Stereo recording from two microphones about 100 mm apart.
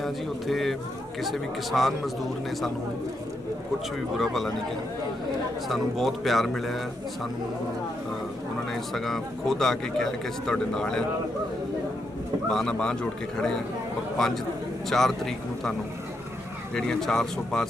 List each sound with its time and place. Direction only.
0.0 s speech: centre (ahead or behind)
4.2 s speech: centre (ahead or behind)
5.6 s speech: centre (ahead or behind)
8.7 s speech: centre (ahead or behind)
12.5 s speech: 5° left (ahead or behind)
16.7 s speech: 5° left (ahead or behind)